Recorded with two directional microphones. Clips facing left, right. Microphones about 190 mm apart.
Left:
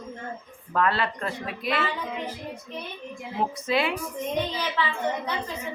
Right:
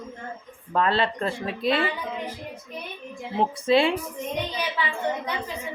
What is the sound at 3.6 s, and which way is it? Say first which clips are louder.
Speech: right 7 dB; 30° right (ahead or behind).